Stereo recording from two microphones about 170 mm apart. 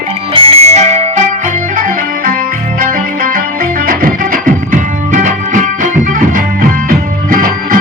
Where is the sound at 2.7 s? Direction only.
55° right (ahead or behind).